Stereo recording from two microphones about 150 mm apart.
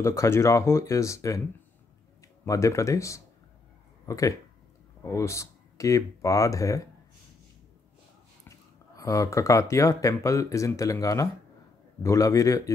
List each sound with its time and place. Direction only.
0.0 s speech: 20° left (ahead or behind)
2.4 s speech: 20° left (ahead or behind)
8.5 s speech: 20° left (ahead or behind)